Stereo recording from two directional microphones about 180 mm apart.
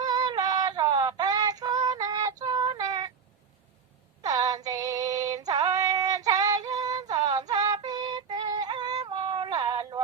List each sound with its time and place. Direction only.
0.0 s synthetic singing: 20° right (ahead or behind)
4.2 s female singing: 20° right (ahead or behind)